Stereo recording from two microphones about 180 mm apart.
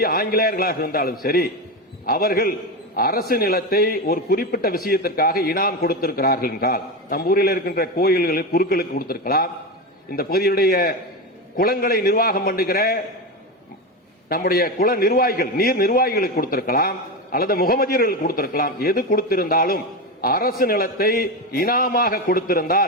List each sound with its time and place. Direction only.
0.0 s a man's voice: 55° left (ahead or behind)
14.3 s a man's voice: 55° left (ahead or behind)